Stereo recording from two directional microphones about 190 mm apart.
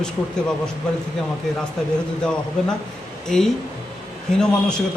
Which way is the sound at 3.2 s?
5° left (ahead or behind).